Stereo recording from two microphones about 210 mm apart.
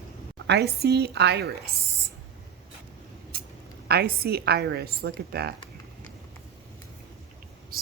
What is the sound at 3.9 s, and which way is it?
A woman's voice, 45° right (ahead or behind).